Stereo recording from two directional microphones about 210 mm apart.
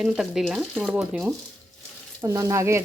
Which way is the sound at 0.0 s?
Centre (ahead or behind).